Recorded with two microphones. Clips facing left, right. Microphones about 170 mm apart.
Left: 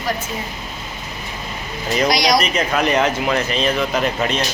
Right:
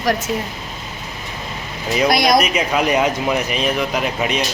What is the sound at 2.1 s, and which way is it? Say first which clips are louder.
Speech: right 3 dB; 55° right (ahead or behind).